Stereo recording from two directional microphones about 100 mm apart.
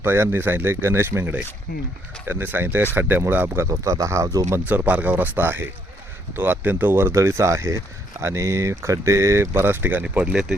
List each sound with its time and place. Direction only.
0.0 s speech: 25° right (ahead or behind)
4.6 s speech: 15° right (ahead or behind)
10.0 s speech: 10° right (ahead or behind)